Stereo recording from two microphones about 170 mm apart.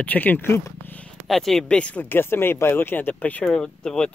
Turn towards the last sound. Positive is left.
turn(degrees=5)  # may be behind; listen again after turning